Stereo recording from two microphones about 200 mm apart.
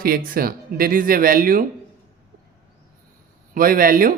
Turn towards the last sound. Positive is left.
turn(degrees=-45)  # may be behind; listen again after turning